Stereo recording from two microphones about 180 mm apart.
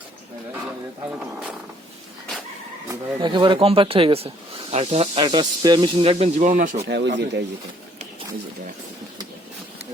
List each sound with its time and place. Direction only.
2.9 s speech: 25° right (ahead or behind); by 6.8 s 45° right (ahead or behind)
6.8 s speech: 75° right (ahead or behind)